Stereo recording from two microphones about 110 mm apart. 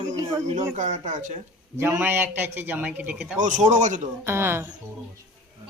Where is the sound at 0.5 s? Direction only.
90° right.